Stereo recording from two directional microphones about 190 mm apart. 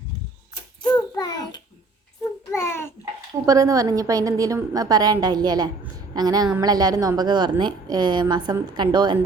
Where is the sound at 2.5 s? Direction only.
15° left (ahead or behind).